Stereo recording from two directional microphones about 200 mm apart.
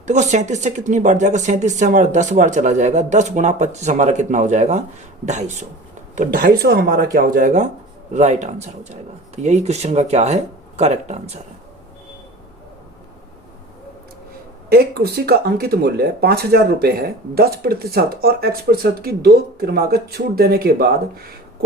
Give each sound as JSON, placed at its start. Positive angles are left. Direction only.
{"t": 0.0, "sound": "speech", "side_deg": -35}
{"t": 6.1, "sound": "speech", "side_deg": -45}
{"t": 14.7, "sound": "speech", "side_deg": -50}